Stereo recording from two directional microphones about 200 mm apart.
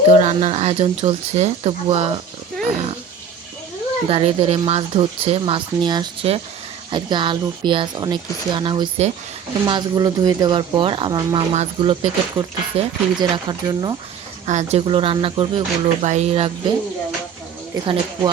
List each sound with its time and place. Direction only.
0.1 s speech: 30° right (ahead or behind)
4.1 s speech: 30° right (ahead or behind)
11.5 s speech: 30° right (ahead or behind)
14.4 s speech: 35° right (ahead or behind)